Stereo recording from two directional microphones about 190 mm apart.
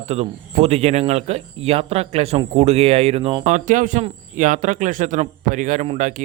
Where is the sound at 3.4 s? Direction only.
40° right (ahead or behind).